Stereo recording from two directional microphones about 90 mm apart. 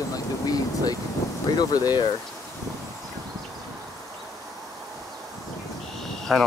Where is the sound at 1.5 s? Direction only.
50° left (ahead or behind).